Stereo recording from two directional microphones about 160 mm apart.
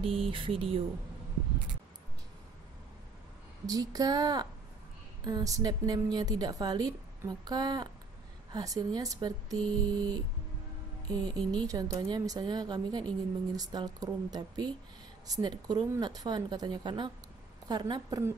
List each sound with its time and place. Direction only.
0.0 s speech: 35° right (ahead or behind)
3.6 s a woman's voice: 25° right (ahead or behind)